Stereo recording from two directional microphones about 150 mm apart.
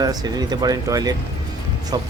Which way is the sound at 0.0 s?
25° right (ahead or behind).